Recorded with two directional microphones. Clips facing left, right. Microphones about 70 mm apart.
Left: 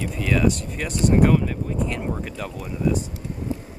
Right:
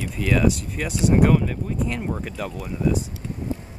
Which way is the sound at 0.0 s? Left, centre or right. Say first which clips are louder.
Even; centre.